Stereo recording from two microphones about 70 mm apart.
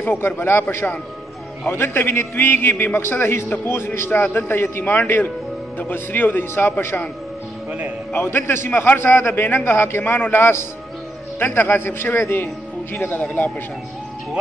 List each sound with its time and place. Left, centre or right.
0.0 s a man's voice: left
8.1 s a man's voice: left